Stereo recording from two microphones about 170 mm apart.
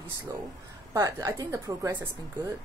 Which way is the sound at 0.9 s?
20° right (ahead or behind).